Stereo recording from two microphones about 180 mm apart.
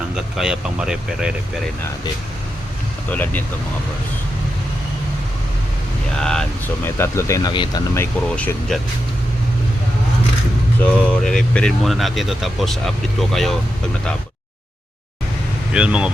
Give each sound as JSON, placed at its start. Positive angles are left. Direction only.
{"t": 0.3, "sound": "speech", "side_deg": -5}
{"t": 3.1, "sound": "speech", "side_deg": 10}
{"t": 6.1, "sound": "speech", "side_deg": 5}
{"t": 7.5, "sound": "speech", "side_deg": 25}
{"t": 7.9, "sound": "speech", "side_deg": 15}
{"t": 8.7, "sound": "speech", "side_deg": 0}
{"t": 10.8, "sound": "speech", "side_deg": 5}
{"t": 15.7, "sound": "speech", "side_deg": -5}